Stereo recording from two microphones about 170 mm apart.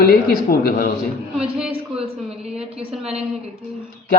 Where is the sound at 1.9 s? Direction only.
35° right (ahead or behind).